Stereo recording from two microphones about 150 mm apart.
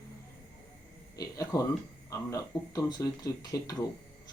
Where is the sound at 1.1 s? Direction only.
25° left (ahead or behind).